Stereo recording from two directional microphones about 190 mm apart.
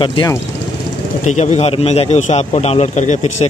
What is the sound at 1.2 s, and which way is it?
A man's voice, 35° left (ahead or behind).